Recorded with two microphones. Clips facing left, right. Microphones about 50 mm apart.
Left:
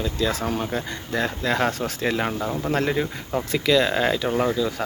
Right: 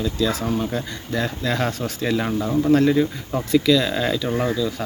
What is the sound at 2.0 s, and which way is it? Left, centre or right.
Speech, left.